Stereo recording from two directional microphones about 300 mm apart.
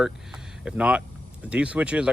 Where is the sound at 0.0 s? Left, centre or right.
Centre.